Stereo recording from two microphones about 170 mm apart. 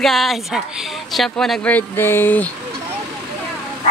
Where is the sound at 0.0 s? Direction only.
Centre (ahead or behind).